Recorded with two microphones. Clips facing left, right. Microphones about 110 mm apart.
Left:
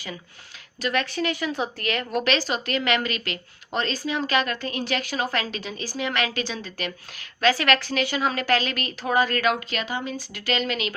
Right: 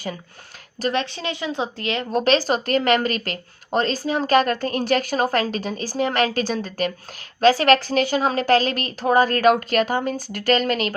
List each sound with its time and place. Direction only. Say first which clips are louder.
0.8 s speech: right 3 dB; 35° right (ahead or behind)
1.1 s speech: left 1 dB; 25° right (ahead or behind)
2.2 s speech: right 6 dB; 40° right (ahead or behind)